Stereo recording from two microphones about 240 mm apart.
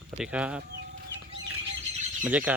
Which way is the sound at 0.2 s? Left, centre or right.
Centre.